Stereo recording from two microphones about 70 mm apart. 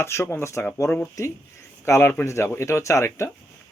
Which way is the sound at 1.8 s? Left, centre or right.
Left.